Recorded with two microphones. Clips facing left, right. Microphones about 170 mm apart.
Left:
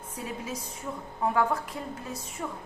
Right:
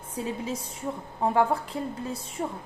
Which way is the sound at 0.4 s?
30° right (ahead or behind).